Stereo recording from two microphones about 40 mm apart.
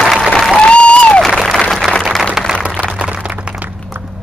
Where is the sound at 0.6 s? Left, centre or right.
Left.